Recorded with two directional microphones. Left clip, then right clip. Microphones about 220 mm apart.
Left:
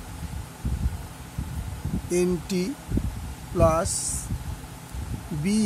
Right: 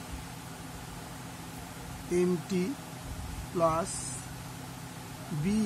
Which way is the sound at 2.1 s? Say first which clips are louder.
Left 4 dB; 40° left (ahead or behind).